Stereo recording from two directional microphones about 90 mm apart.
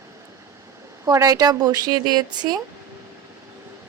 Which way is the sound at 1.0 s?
40° right (ahead or behind).